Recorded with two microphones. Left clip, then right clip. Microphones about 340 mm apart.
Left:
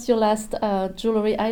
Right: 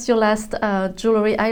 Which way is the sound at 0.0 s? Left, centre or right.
Right.